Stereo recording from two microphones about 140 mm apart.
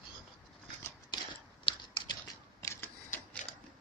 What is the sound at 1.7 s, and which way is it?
Typing, 40° left (ahead or behind).